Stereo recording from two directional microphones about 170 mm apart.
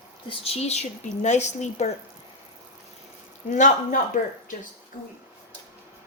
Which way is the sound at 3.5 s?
50° left (ahead or behind).